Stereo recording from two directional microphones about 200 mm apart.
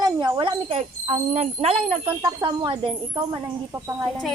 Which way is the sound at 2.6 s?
25° right (ahead or behind).